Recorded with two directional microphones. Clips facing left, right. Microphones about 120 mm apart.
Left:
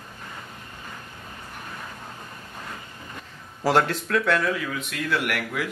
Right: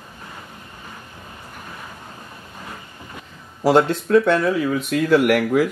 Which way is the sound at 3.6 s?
20° right (ahead or behind).